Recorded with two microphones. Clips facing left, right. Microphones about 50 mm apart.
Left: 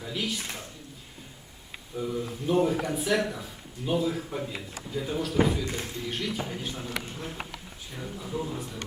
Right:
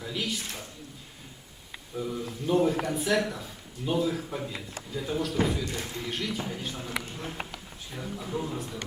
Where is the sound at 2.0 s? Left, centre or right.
Centre.